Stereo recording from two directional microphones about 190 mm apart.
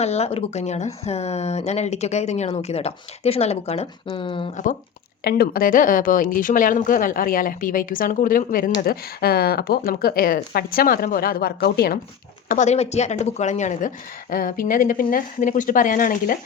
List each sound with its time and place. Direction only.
0.0 s speech: 35° left (ahead or behind)
4.5 s speech: 40° left (ahead or behind)
5.2 s a woman's voice: 50° left (ahead or behind)
12.5 s a woman's voice: 40° left (ahead or behind)